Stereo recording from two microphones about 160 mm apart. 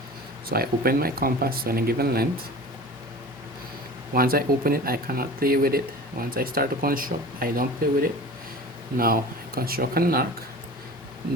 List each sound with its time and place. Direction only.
0.4 s speech: 70° right (ahead or behind)
4.1 s speech: 65° right (ahead or behind)